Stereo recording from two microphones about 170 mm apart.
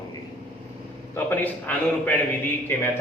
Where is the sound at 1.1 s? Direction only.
10° left (ahead or behind).